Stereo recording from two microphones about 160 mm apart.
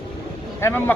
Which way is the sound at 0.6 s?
15° left (ahead or behind).